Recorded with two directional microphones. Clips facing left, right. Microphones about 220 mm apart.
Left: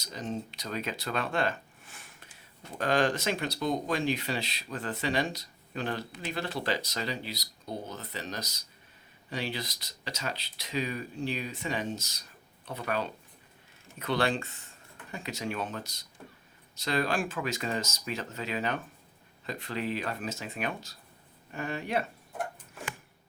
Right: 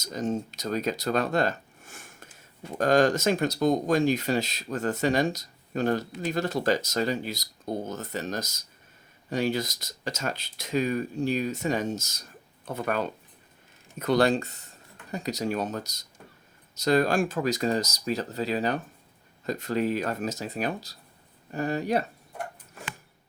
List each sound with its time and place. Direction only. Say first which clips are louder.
0.0 s speech: right 7 dB; 45° right (ahead or behind)